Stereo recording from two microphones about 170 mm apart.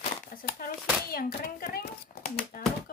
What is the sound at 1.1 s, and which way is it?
Speech, 60° left (ahead or behind).